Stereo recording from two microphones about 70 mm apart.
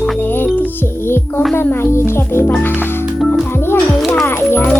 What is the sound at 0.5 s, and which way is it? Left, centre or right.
Music, left.